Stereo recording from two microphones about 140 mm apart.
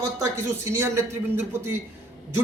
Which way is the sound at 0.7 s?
20° right (ahead or behind).